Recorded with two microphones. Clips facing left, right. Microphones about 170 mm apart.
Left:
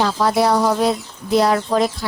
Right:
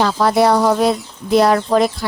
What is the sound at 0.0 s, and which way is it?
Speech, 60° right (ahead or behind).